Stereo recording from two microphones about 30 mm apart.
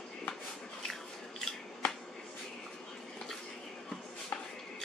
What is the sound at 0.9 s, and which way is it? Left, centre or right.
Biting, centre.